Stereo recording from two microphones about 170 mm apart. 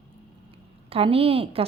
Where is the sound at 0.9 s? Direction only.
35° right (ahead or behind).